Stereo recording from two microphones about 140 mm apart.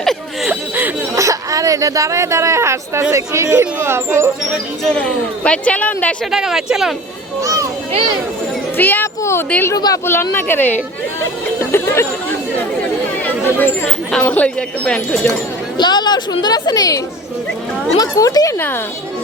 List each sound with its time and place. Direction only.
0.0 s a sound: centre (ahead or behind)
0.8 s speech: 20° right (ahead or behind)
4.8 s speech: 5° left (ahead or behind)
6.3 s speech: 5° right (ahead or behind)
7.4 s a sound: 25° right (ahead or behind)
8.8 s speech: 15° left (ahead or behind)
14.1 s speech: 10° left (ahead or behind)
15.8 s a woman's voice: 30° left (ahead or behind)